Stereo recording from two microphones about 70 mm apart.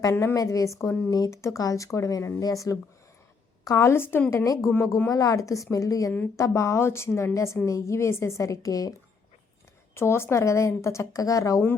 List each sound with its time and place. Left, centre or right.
0.1 s a woman's voice: left
0.3 s speech: left
1.1 s speech: left
3.8 s a woman's voice: left
4.4 s a woman's voice: left
9.9 s speech: left